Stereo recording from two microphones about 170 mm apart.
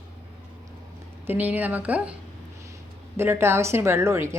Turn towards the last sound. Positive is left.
turn(degrees=-15)  # may be behind; listen again after turning